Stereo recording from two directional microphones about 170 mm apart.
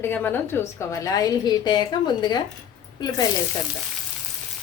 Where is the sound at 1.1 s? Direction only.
20° left (ahead or behind).